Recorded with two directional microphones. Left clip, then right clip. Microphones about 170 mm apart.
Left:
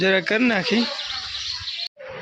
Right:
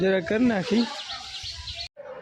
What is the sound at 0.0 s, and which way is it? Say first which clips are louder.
Speech: left 4 dB; 10° right (ahead or behind).